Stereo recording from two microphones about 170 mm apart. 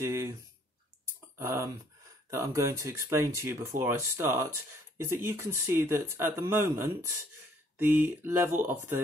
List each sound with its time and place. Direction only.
0.0 s speech: 15° right (ahead or behind)
1.4 s speech: 15° right (ahead or behind)